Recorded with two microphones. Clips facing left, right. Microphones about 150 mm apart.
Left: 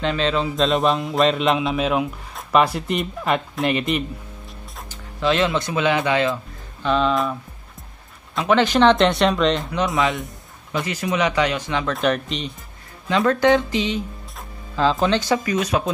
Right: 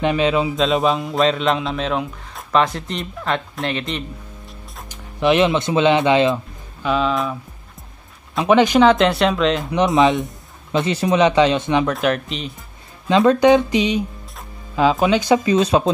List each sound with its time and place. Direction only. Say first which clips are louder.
0.0 s speech: right 4 dB; 15° right (ahead or behind)
0.6 s a man's voice: right 1 dB; centre (ahead or behind)
4.8 s speech: right 4 dB; 20° right (ahead or behind)
6.8 s a man's voice: even; 5° right (ahead or behind)
8.4 s a man's voice: right 3 dB; 15° right (ahead or behind)
9.7 s speech: right 6 dB; 20° right (ahead or behind)
11.9 s a man's voice: right 1 dB; centre (ahead or behind)
13.1 s speech: right 4 dB; 20° right (ahead or behind)